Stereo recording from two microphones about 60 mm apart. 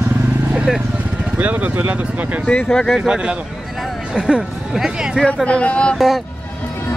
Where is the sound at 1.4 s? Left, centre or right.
Right.